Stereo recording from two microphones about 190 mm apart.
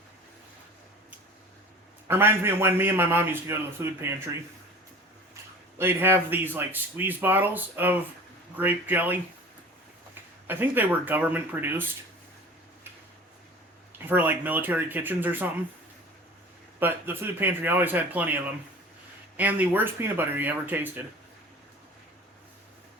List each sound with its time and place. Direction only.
2.0 s a man's voice: 10° right (ahead or behind)
5.7 s a man's voice: 10° right (ahead or behind)
10.4 s a man's voice: 10° right (ahead or behind)
14.1 s a man's voice: 10° right (ahead or behind)
16.8 s a man's voice: 10° right (ahead or behind)